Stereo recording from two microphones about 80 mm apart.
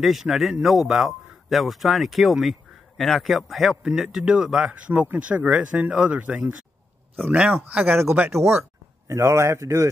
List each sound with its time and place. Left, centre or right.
0.0 s speech: centre
4.7 s speech: centre
8.3 s a man's voice: right